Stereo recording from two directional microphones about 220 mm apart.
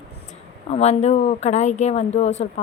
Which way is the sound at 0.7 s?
30° left (ahead or behind).